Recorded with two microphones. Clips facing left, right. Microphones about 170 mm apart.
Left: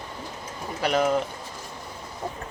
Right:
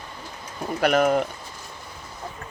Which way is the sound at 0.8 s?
55° right (ahead or behind).